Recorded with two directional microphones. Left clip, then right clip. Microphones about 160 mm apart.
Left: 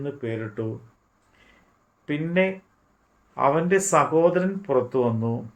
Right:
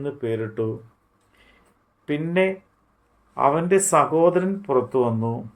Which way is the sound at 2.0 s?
55° right (ahead or behind).